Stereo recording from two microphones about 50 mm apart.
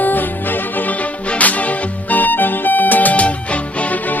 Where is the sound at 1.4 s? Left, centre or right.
Left.